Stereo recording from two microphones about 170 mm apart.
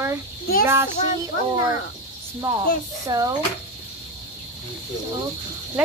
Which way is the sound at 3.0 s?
20° right (ahead or behind).